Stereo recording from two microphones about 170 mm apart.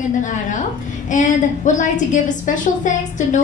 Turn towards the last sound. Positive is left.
turn(degrees=45)  # may be behind; listen again after turning